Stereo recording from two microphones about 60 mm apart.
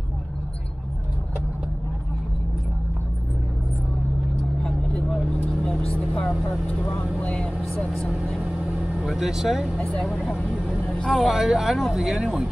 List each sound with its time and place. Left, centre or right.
4.6 s vehicle: centre
7.2 s speech: centre
8.4 s vehicle: centre
9.0 s speech: centre
9.8 s speech: centre
10.1 s speech: centre
11.1 s speech: centre